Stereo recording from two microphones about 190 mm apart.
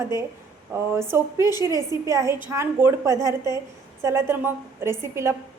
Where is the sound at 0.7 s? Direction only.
10° right (ahead or behind).